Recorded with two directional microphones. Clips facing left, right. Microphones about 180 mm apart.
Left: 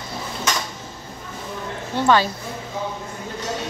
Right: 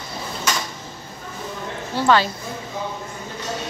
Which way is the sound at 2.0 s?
15° left (ahead or behind).